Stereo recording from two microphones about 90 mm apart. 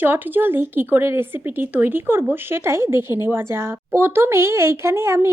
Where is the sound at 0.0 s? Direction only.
20° right (ahead or behind).